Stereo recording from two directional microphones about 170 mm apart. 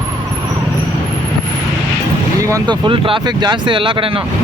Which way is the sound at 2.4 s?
20° right (ahead or behind).